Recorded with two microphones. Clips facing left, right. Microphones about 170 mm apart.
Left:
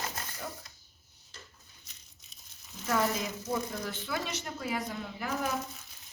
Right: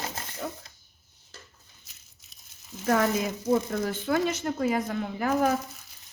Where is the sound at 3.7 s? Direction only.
45° right (ahead or behind).